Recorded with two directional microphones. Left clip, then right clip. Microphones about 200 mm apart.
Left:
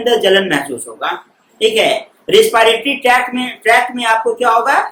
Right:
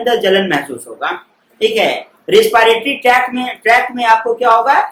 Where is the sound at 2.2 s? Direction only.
5° right (ahead or behind).